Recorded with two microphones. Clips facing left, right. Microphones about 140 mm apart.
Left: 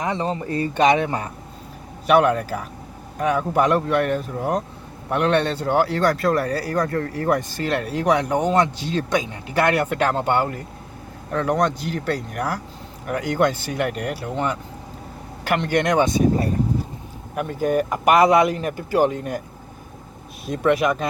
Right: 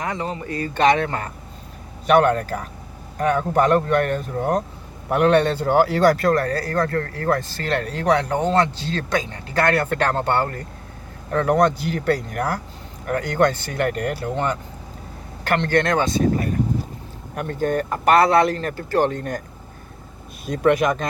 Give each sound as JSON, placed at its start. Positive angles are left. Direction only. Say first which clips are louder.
{"t": 0.0, "sound": "speech", "louder": "left 3 dB", "side_deg": 25}
{"t": 0.7, "sound": "speech", "louder": "even", "side_deg": 15}
{"t": 11.3, "sound": "speech", "louder": "right 3 dB", "side_deg": 0}
{"t": 17.3, "sound": "speech", "louder": "left 1 dB", "side_deg": 5}
{"t": 20.4, "sound": "speech", "louder": "right 1 dB", "side_deg": 0}